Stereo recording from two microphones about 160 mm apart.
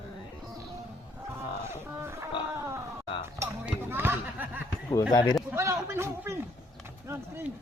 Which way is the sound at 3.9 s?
15° right (ahead or behind).